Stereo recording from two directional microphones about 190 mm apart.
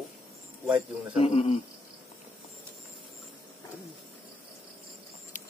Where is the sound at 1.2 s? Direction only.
30° left (ahead or behind).